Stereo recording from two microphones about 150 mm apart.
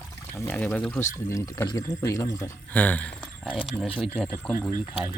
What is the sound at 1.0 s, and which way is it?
Speech, 20° left (ahead or behind).